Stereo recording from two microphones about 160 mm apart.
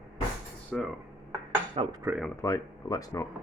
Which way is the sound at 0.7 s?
5° left (ahead or behind).